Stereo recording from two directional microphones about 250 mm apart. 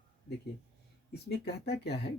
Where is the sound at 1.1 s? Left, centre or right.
Left.